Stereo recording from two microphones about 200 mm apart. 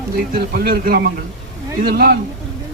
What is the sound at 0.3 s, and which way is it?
A man's voice, 50° right (ahead or behind).